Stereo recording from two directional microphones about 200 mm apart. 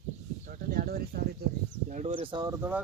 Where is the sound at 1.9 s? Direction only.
40° right (ahead or behind).